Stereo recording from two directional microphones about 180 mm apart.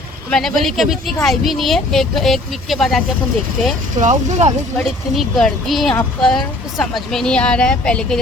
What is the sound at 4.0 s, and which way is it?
Speech, 40° right (ahead or behind).